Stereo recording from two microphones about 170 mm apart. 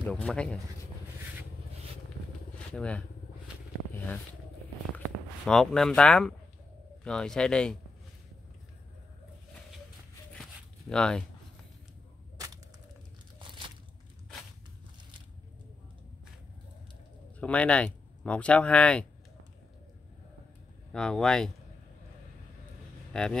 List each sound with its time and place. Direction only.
0.0 s speech: 5° left (ahead or behind)
2.7 s speech: 5° left (ahead or behind)
4.9 s speech: 5° left (ahead or behind)
10.3 s zipper: 5° left (ahead or behind)
17.4 s speech: 10° left (ahead or behind)
20.9 s speech: 5° left (ahead or behind)
23.1 s speech: 5° left (ahead or behind)